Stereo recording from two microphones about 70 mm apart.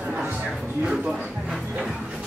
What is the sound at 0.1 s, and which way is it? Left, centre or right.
Music, centre.